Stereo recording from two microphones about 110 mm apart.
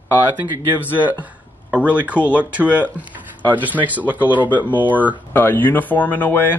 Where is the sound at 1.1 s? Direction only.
15° right (ahead or behind).